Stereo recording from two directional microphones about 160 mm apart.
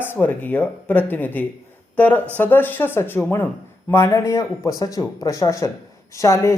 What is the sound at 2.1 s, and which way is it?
Speech, 15° right (ahead or behind).